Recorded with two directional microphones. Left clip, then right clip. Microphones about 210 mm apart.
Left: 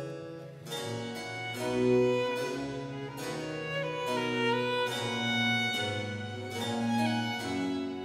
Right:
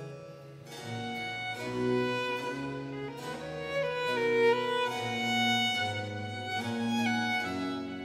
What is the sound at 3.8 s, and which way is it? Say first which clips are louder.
Music: right 3 dB; 30° right (ahead or behind).